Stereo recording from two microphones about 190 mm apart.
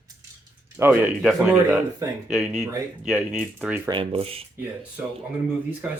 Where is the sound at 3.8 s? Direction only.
25° right (ahead or behind).